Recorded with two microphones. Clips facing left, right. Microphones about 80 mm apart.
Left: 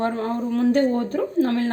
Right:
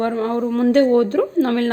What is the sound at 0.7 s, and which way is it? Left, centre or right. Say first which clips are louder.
Speech: right 6 dB; right.